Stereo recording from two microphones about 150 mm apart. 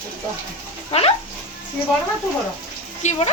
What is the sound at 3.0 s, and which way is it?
Speech, 50° left (ahead or behind).